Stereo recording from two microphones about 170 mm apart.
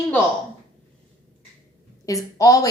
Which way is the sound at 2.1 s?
20° left (ahead or behind).